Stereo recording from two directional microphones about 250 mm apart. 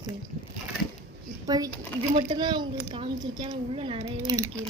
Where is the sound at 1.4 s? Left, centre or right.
Centre.